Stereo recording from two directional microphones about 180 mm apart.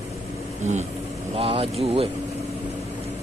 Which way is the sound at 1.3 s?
30° right (ahead or behind).